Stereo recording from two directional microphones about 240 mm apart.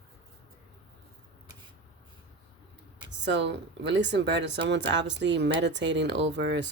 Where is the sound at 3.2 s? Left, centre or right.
Right.